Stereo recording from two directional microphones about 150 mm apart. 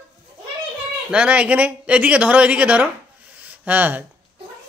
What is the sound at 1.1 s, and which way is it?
Speech, 10° right (ahead or behind).